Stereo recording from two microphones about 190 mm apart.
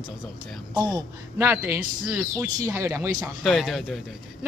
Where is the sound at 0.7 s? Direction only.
20° right (ahead or behind).